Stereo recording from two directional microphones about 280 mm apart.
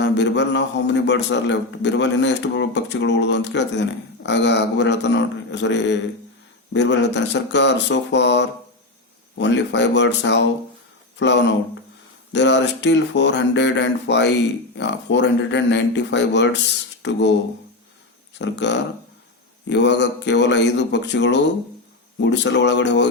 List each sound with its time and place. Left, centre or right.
0.0 s a man's voice: left
18.3 s a man's voice: left